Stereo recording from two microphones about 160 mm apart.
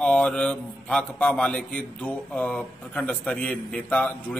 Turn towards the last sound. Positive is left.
turn(degrees=10)  # may be behind; listen again after turning